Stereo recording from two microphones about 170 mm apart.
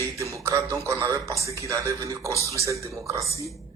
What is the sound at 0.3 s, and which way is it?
A man's voice, 15° right (ahead or behind).